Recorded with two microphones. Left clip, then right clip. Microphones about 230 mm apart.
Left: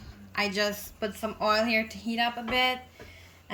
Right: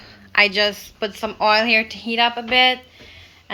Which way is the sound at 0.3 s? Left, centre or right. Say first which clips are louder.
Right 12 dB; centre.